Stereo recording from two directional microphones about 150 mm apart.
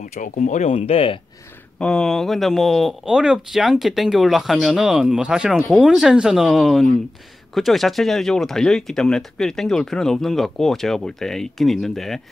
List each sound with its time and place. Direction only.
0.0 s speech: 60° left (ahead or behind); by 1.2 s 40° left (ahead or behind)
1.8 s speech: 5° left (ahead or behind)